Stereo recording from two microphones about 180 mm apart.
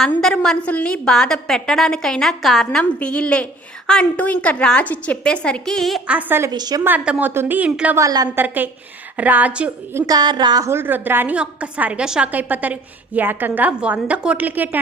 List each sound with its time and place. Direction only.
0.0 s a woman's voice: 5° left (ahead or behind)
6.5 s a woman's voice: 20° right (ahead or behind)
6.8 s a woman's voice: 10° right (ahead or behind)
10.1 s a woman's voice: 25° right (ahead or behind)